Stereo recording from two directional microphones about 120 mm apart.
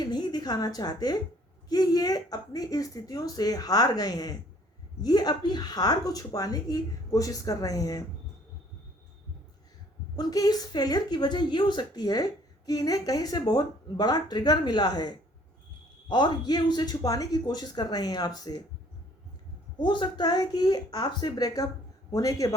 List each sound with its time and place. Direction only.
0.0 s a woman's voice: 35° left (ahead or behind)
10.2 s speech: 30° left (ahead or behind)
19.8 s speech: 40° left (ahead or behind)